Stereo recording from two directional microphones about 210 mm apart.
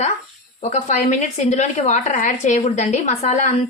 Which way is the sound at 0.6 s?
35° left (ahead or behind).